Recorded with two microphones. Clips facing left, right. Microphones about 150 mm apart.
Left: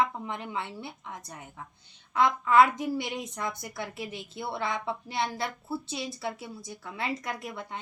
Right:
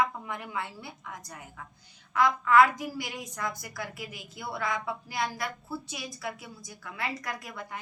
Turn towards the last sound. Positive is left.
turn(degrees=25)  # may be behind; listen again after turning